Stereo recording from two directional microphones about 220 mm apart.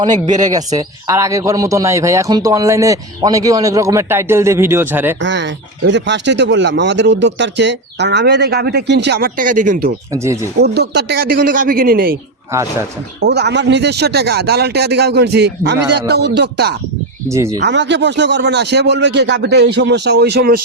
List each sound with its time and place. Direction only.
0.0 s a man's voice: 20° right (ahead or behind)
5.2 s speech: 55° right (ahead or behind); by 9.9 s 35° right (ahead or behind)
10.1 s a man's voice: 15° right (ahead or behind)
10.6 s speech: 50° right (ahead or behind)
13.1 s speech: 50° right (ahead or behind)
17.2 s a man's voice: 15° right (ahead or behind)
17.6 s speech: 50° right (ahead or behind)